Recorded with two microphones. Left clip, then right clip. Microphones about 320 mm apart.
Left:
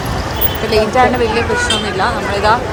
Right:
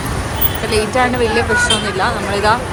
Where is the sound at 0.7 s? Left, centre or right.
Centre.